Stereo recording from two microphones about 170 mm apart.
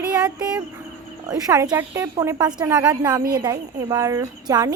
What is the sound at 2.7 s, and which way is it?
Speech, 10° right (ahead or behind).